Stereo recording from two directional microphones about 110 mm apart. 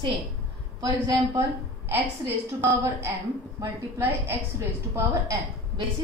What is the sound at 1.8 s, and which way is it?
A woman's voice, 20° right (ahead or behind).